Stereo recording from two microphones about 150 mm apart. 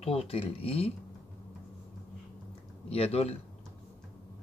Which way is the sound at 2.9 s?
40° left (ahead or behind).